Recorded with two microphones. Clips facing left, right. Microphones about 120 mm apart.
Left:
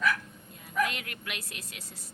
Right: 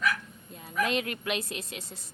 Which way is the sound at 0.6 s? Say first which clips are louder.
Right 2 dB; 25° right (ahead or behind).